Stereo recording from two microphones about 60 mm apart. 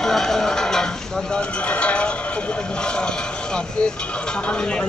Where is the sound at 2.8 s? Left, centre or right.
Centre.